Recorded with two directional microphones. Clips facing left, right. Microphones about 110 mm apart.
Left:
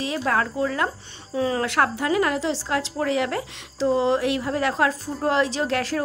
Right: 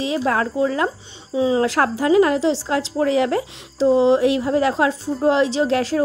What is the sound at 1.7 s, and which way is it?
A woman's voice, 30° right (ahead or behind).